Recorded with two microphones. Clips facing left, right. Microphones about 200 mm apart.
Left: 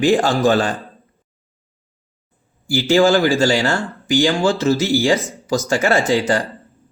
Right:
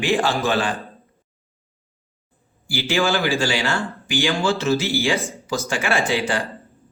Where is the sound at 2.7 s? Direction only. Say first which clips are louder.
Left 8 dB; 45° left (ahead or behind).